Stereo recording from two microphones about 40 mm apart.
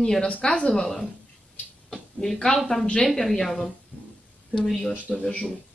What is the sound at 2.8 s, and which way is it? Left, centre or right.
Speech, left.